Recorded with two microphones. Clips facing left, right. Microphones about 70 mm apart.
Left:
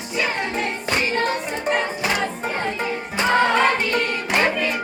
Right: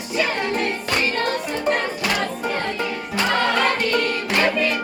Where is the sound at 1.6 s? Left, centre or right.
Centre.